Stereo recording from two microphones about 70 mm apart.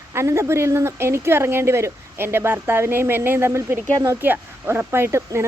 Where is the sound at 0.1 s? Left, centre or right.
Right.